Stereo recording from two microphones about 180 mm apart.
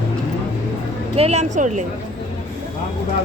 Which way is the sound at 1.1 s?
35° right (ahead or behind).